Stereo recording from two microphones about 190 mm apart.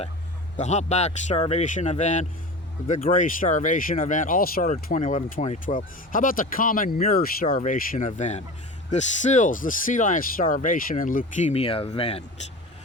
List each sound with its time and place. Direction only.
0.5 s speech: 40° left (ahead or behind)